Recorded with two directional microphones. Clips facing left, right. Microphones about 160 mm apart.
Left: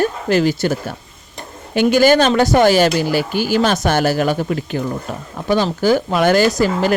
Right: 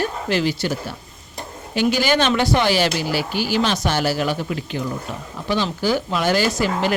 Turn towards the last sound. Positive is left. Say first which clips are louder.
# left 5 dB
turn(degrees=45)  # may be behind; listen again after turning